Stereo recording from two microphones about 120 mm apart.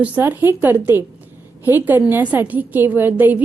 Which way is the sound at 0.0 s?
15° right (ahead or behind).